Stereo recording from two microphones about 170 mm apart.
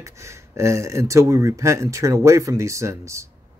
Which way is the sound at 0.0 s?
15° right (ahead or behind).